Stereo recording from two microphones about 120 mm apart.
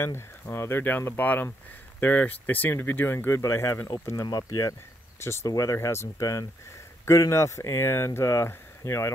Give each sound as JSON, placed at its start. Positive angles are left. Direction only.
{"t": 0.0, "sound": "speech", "side_deg": 20}